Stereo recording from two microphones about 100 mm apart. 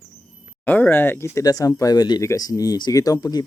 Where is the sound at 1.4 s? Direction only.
40° left (ahead or behind).